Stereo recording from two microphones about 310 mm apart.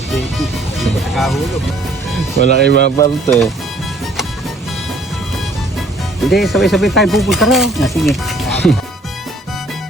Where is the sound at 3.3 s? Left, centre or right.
Centre.